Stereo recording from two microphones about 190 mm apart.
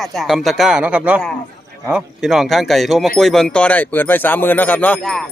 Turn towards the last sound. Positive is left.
turn(degrees=0)  # may be behind; listen again after turning